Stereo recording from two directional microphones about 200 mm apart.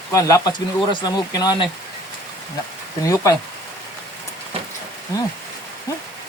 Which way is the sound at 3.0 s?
15° left (ahead or behind).